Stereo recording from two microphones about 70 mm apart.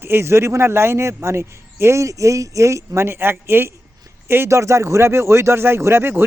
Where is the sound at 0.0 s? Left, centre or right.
Right.